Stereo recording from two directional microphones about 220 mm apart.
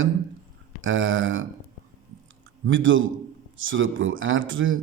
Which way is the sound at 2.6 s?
60° right (ahead or behind).